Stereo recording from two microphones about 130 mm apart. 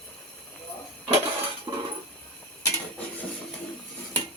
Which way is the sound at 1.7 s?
35° right (ahead or behind).